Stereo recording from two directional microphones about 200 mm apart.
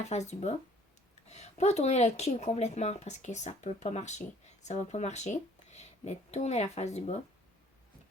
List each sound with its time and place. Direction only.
0.0 s speech: 35° left (ahead or behind)